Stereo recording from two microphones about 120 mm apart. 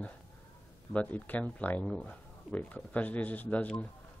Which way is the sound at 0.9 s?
15° left (ahead or behind).